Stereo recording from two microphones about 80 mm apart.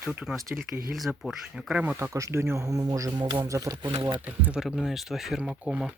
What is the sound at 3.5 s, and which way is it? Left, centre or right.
Speech, right.